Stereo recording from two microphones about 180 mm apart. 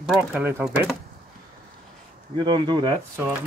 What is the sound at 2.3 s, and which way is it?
Speech, 25° right (ahead or behind).